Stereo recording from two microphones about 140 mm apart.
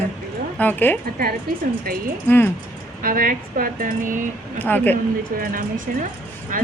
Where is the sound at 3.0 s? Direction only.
85° right; by 4.3 s 70° right (ahead or behind).